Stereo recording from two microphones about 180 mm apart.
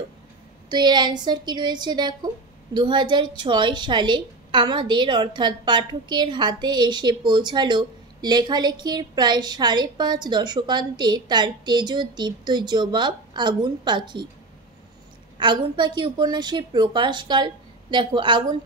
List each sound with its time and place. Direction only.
0.7 s a woman's voice: 25° right (ahead or behind)
15.3 s a woman's voice: 25° right (ahead or behind)